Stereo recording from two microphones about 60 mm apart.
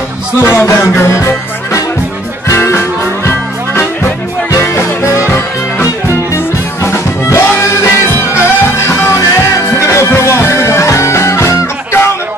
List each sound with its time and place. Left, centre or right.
0.4 s music: left
6.3 s music: left